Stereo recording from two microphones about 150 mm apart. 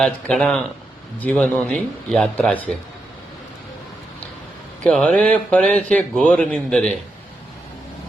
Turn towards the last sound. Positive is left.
turn(degrees=5)  # may be behind; listen again after turning